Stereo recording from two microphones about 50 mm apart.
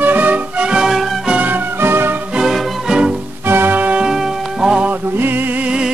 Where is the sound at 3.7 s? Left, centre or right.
Right.